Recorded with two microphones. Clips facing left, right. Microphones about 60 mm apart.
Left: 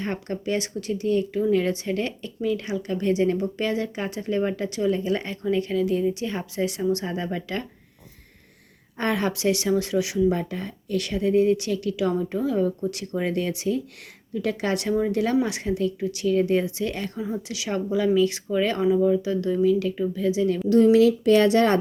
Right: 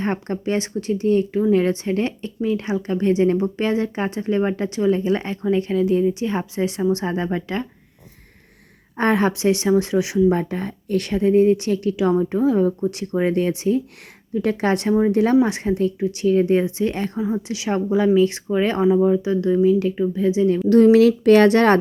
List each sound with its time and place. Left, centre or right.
0.0 s a woman's voice: right
9.0 s speech: right
20.8 s speech: right